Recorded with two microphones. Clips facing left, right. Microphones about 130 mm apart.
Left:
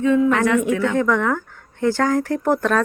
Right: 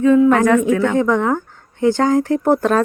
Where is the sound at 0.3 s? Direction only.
45° right (ahead or behind).